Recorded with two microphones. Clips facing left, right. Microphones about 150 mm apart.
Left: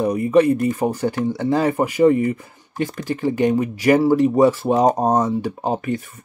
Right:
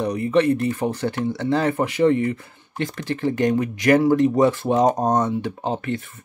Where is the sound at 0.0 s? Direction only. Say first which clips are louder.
Left 3 dB; 10° left (ahead or behind).